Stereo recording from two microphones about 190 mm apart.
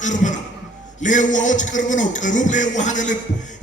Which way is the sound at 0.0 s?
40° left (ahead or behind).